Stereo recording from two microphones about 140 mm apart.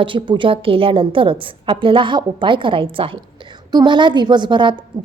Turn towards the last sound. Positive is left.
turn(degrees=-35)  # may be behind; listen again after turning